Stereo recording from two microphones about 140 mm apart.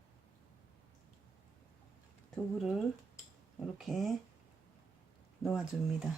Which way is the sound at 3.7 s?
Centre (ahead or behind).